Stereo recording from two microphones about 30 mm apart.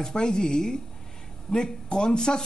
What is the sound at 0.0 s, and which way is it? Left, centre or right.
Speech, left.